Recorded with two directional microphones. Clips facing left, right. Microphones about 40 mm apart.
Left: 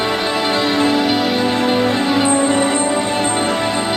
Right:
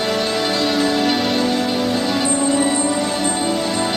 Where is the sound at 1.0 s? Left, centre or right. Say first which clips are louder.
Left 2 dB; centre.